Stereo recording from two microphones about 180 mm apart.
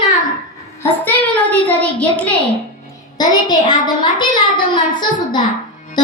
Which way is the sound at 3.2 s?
25° left (ahead or behind).